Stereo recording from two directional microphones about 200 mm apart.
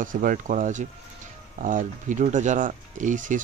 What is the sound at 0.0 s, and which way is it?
Speech, 40° right (ahead or behind).